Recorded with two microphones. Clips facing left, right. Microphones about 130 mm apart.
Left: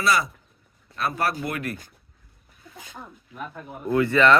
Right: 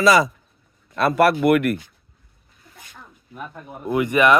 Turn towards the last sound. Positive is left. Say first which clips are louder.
# right 1 dB
turn(degrees=-15)  # may be behind; listen again after turning